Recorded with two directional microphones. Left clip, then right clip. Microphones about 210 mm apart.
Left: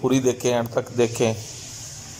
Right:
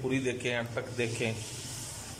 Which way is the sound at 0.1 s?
15° left (ahead or behind).